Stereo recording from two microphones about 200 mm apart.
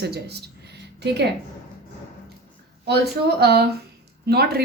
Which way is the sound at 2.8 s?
55° right (ahead or behind).